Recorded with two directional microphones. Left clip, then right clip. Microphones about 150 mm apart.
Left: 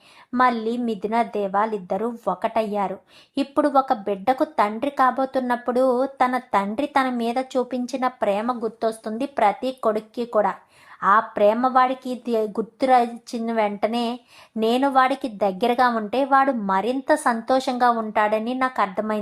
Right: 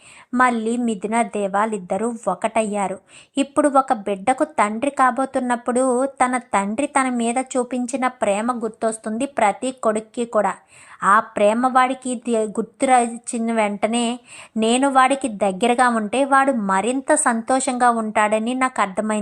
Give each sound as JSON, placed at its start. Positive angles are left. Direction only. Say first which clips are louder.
{"t": 0.3, "sound": "a woman's voice", "louder": "right 2 dB", "side_deg": -20}